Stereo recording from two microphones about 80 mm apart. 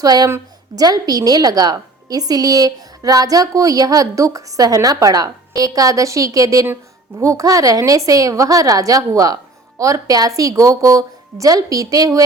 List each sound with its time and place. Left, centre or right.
0.0 s a woman's voice: right